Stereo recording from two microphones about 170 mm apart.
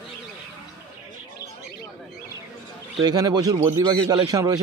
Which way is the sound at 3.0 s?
25° right (ahead or behind).